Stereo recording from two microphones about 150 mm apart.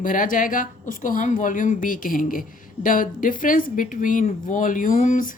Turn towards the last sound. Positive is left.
turn(degrees=60)  # may be behind; listen again after turning